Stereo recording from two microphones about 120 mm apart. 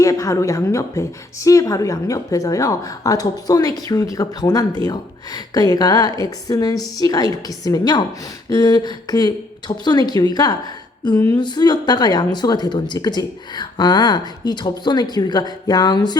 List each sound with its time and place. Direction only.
0.0 s a woman's voice: 25° left (ahead or behind)